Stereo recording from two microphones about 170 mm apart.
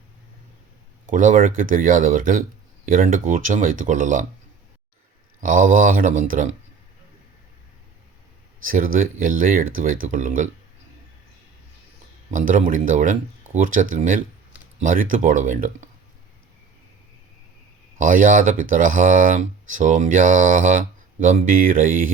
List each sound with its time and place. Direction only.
1.1 s speech: 50° right (ahead or behind)
5.4 s speech: 50° right (ahead or behind)
8.6 s speech: 55° right (ahead or behind)
12.3 s speech: 50° right (ahead or behind)
17.9 s speech: 50° right (ahead or behind)